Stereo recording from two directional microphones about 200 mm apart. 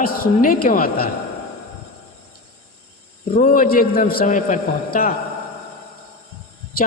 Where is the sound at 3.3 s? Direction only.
40° left (ahead or behind).